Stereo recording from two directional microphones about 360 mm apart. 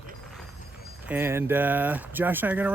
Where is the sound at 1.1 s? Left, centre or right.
Centre.